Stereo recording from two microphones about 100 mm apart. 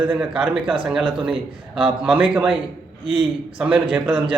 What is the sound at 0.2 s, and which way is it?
A man's voice, 5° right (ahead or behind).